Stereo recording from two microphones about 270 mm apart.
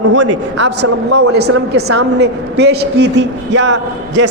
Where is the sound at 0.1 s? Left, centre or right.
Right.